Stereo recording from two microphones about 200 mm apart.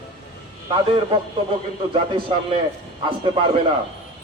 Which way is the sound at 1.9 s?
25° right (ahead or behind).